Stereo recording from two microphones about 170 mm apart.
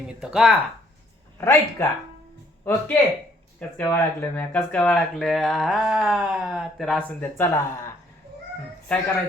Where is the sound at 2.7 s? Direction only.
10° left (ahead or behind).